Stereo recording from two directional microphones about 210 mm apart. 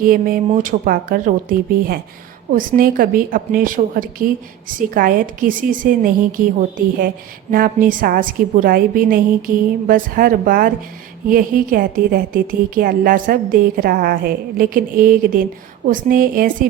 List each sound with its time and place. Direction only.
0.0 s a woman's voice: 45° right (ahead or behind)